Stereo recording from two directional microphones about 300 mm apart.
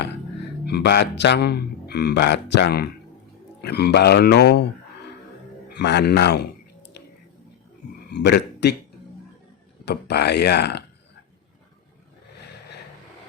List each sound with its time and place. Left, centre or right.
0.6 s a man's voice: left
8.1 s speech: left
9.8 s a man's voice: left